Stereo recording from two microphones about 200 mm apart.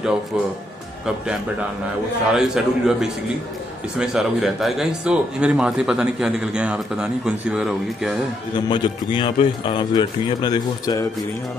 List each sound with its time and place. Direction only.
2.3 s speech: 5° right (ahead or behind)
8.6 s speech: 25° left (ahead or behind)